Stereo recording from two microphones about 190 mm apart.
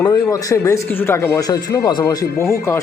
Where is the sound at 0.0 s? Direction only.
15° left (ahead or behind).